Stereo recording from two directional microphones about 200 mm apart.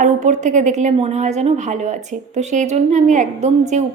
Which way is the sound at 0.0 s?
40° right (ahead or behind).